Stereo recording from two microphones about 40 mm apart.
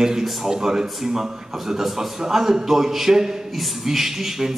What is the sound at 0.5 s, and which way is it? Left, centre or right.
A man's voice, centre.